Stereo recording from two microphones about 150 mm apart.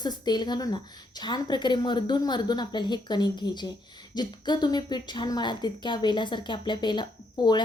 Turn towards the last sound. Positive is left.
turn(degrees=30)  # may be behind; listen again after turning